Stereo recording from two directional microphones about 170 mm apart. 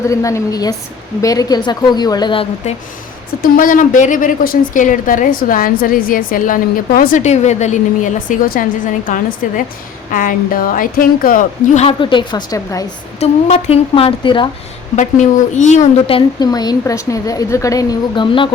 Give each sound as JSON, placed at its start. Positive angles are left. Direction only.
{"t": 0.1, "sound": "a woman's voice", "side_deg": 20}
{"t": 3.4, "sound": "a woman's voice", "side_deg": 55}
{"t": 13.1, "sound": "a woman's voice", "side_deg": 40}
{"t": 14.9, "sound": "a woman's voice", "side_deg": 45}